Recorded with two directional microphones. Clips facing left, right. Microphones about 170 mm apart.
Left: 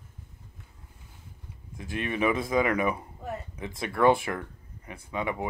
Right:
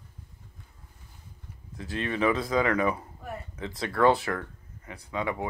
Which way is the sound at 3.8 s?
20° left (ahead or behind).